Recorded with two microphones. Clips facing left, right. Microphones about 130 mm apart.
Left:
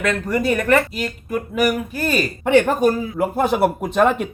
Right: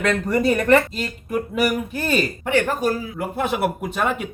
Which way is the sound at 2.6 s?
50° left (ahead or behind).